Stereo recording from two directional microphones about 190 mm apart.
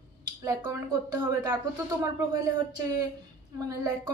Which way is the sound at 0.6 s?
15° right (ahead or behind).